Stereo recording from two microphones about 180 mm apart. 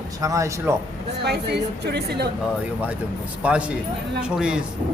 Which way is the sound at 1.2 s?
65° right (ahead or behind).